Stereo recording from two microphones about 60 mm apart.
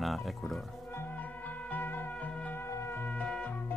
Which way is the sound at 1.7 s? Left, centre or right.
Left.